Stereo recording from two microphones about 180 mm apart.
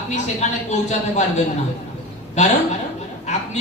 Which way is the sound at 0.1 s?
40° left (ahead or behind).